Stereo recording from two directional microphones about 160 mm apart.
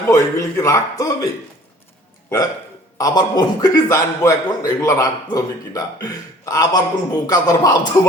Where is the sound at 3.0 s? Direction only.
25° left (ahead or behind).